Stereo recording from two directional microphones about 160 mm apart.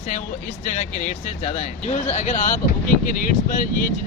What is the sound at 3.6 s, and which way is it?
Speech, 60° left (ahead or behind).